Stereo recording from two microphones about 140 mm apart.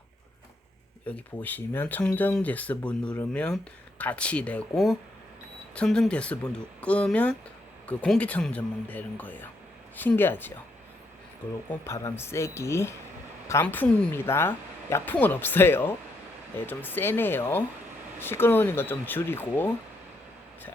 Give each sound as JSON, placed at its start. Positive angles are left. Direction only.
{"t": 1.0, "sound": "speech", "side_deg": 10}
{"t": 11.7, "sound": "speech", "side_deg": 20}